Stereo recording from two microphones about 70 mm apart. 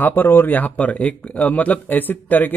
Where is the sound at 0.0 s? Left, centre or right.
Left.